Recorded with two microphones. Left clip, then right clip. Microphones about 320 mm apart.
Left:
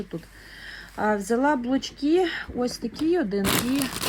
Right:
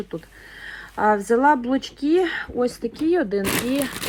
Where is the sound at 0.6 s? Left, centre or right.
Centre.